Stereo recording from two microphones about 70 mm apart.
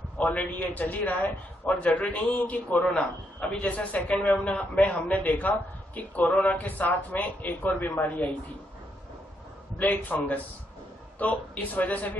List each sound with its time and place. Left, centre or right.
0.2 s a man's voice: left
9.8 s a man's voice: left